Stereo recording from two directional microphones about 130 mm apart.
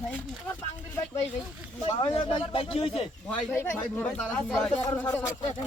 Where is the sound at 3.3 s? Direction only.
15° left (ahead or behind).